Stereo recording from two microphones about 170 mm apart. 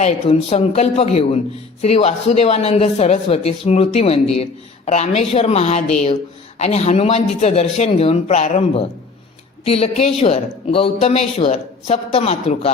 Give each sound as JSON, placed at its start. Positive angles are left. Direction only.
{"t": 0.0, "sound": "speech", "side_deg": 35}